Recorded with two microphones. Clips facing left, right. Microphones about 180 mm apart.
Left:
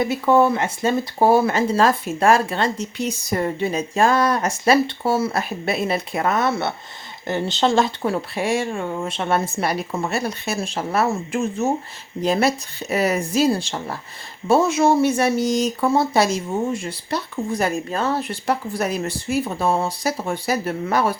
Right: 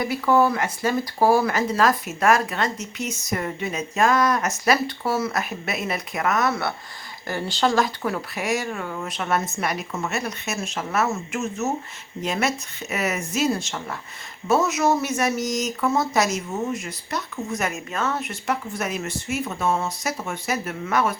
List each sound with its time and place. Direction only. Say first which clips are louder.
0.0 s speech: left 3 dB; 25° left (ahead or behind)